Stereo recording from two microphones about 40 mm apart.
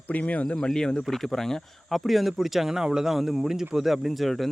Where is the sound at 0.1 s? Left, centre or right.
Left.